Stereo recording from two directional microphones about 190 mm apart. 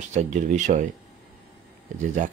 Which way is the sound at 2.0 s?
40° right (ahead or behind).